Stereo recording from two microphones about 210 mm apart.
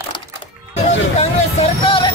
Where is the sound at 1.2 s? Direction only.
25° left (ahead or behind).